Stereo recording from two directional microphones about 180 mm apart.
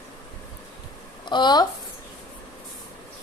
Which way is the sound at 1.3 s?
25° left (ahead or behind).